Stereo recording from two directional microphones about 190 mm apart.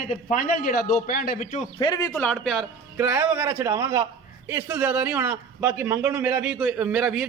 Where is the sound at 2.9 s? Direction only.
10° right (ahead or behind).